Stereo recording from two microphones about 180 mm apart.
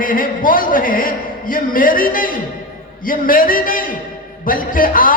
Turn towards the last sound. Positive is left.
turn(degrees=50)  # may be behind; listen again after turning